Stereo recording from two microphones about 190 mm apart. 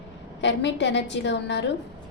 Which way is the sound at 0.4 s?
65° left (ahead or behind).